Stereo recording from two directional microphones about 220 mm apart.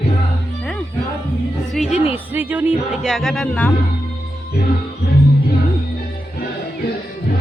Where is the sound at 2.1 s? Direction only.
10° right (ahead or behind).